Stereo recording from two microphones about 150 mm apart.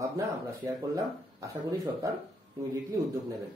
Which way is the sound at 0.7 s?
25° right (ahead or behind).